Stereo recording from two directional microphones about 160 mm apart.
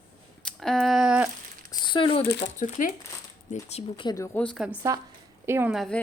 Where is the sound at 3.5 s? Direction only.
40° left (ahead or behind).